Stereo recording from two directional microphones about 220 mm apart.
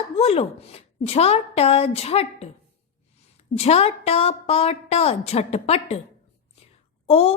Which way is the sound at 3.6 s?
30° left (ahead or behind).